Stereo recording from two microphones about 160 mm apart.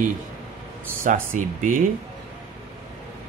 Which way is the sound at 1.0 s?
55° right (ahead or behind).